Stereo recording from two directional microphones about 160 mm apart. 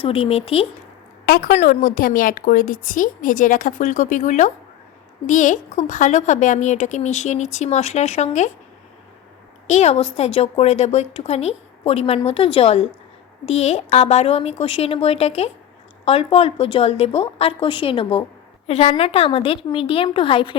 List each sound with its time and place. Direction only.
0.0 s a woman's voice: 35° left (ahead or behind)
1.2 s a woman's voice: 70° left (ahead or behind)
1.6 s a woman's voice: 60° left (ahead or behind)
9.6 s a woman's voice: 45° left (ahead or behind)